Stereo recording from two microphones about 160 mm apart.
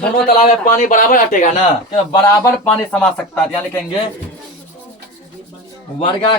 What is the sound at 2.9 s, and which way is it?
Speech, 5° left (ahead or behind).